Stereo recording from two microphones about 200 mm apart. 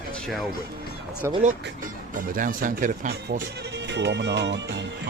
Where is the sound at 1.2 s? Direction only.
15° right (ahead or behind).